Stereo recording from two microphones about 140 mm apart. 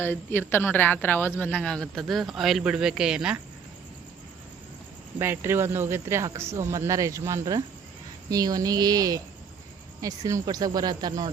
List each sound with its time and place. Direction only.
0.0 s speech: 15° left (ahead or behind); by 3.4 s 5° right (ahead or behind)
5.2 s speech: 15° right (ahead or behind)